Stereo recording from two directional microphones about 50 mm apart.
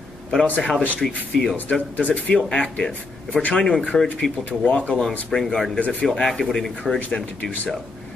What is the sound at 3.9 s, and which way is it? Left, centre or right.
Speech, centre.